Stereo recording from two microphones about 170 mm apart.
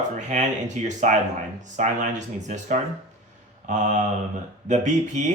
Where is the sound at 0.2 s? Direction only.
45° right (ahead or behind).